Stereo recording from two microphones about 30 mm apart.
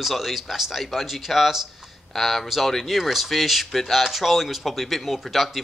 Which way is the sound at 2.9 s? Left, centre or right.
Centre.